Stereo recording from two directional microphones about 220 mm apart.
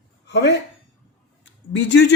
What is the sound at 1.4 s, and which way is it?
Speech, 55° left (ahead or behind).